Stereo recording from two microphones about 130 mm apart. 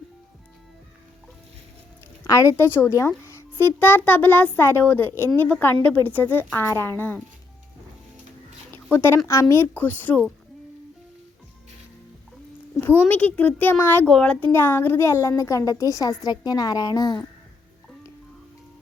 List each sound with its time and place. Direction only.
2.2 s a child's voice: 25° left (ahead or behind)
8.7 s a child's voice: 15° left (ahead or behind)
12.7 s a child's voice: 15° left (ahead or behind); by 17.2 s 30° left (ahead or behind)